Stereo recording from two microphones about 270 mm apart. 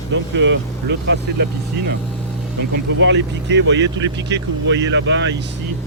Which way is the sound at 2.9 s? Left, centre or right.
Right.